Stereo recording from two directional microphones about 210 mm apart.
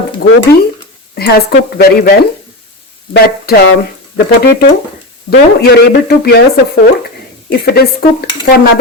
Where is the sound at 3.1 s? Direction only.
45° left (ahead or behind).